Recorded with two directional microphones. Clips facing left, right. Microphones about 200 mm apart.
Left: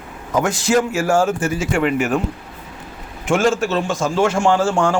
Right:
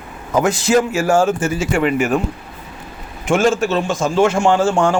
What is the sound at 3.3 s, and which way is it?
A man's voice, 20° right (ahead or behind).